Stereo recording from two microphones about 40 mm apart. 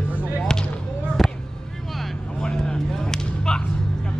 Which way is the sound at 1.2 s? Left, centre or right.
Centre.